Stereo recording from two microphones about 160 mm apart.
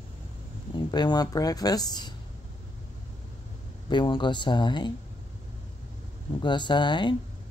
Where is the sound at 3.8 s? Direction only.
30° left (ahead or behind).